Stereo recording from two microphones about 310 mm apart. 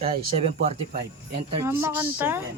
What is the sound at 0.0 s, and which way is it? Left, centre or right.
Speech, centre.